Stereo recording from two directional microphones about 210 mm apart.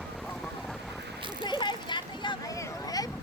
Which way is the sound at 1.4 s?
20° left (ahead or behind).